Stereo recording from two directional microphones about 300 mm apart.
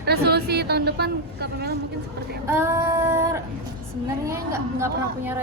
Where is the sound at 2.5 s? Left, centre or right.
Centre.